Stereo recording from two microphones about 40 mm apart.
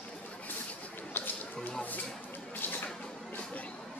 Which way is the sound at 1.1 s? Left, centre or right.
Left.